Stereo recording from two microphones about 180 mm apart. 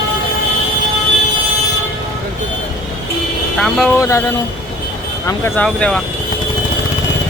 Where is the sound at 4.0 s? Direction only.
15° left (ahead or behind).